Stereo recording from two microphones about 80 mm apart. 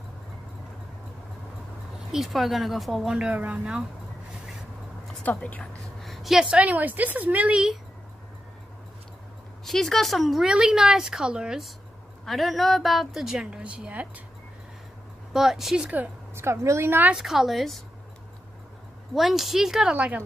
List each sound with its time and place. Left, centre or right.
2.1 s a woman's voice: centre
5.2 s a woman's voice: centre
5.9 s a sound: centre
6.6 s a woman's voice: centre
9.7 s a woman's voice: centre
15.3 s a woman's voice: centre
16.3 s a woman's voice: right
17.1 s a woman's voice: centre
19.1 s a woman's voice: centre